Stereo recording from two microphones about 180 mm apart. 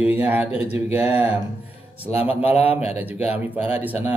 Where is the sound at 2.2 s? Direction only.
35° left (ahead or behind).